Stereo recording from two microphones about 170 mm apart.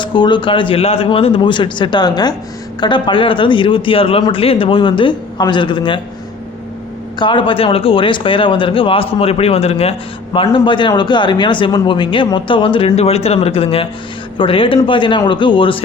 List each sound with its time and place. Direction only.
0.0 s a man's voice: 25° left (ahead or behind)
7.2 s a man's voice: 30° left (ahead or behind)